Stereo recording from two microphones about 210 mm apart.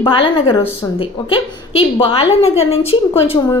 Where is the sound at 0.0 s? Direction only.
25° left (ahead or behind).